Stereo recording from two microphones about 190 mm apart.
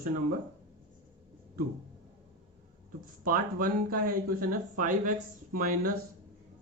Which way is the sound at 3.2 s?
50° right (ahead or behind).